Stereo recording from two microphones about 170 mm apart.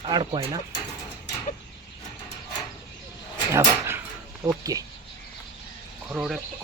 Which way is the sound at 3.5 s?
15° right (ahead or behind).